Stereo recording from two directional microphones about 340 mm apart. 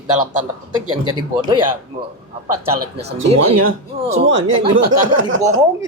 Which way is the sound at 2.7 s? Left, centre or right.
Right.